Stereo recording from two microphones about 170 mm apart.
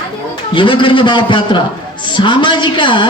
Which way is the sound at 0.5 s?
30° left (ahead or behind).